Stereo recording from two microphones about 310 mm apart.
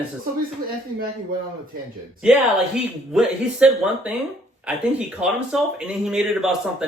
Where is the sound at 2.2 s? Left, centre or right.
Centre.